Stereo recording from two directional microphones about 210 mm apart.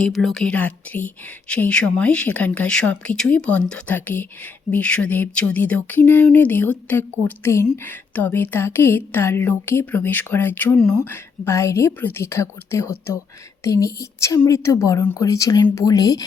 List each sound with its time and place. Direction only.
0.0 s speech: centre (ahead or behind); by 16.2 s 15° left (ahead or behind)